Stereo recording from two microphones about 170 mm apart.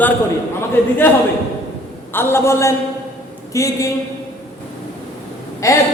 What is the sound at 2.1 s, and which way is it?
A man's voice, 15° left (ahead or behind).